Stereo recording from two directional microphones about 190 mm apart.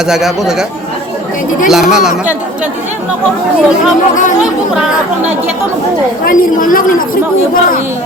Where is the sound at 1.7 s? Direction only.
Centre (ahead or behind).